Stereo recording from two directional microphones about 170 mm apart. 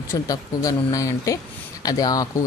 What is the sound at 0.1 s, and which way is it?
Speech, 20° left (ahead or behind).